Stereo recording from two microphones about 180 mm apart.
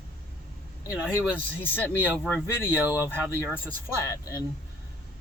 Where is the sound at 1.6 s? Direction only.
10° left (ahead or behind).